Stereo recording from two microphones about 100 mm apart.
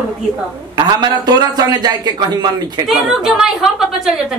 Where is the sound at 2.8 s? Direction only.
Centre (ahead or behind).